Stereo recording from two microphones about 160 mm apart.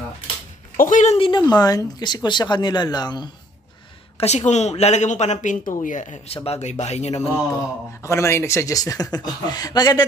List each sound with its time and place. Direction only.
0.7 s speech: 50° left (ahead or behind)
1.1 s speech: 35° left (ahead or behind)
1.5 s speech: 20° left (ahead or behind)
4.2 s speech: 45° left (ahead or behind)
8.0 s speech: 15° left (ahead or behind)